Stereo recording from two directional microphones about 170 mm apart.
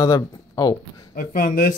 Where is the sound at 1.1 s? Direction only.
55° left (ahead or behind).